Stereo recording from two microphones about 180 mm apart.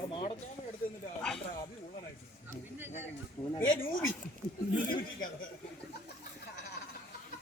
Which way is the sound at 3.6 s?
50° left (ahead or behind).